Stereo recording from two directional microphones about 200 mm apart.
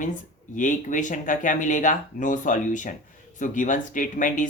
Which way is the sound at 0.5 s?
40° left (ahead or behind).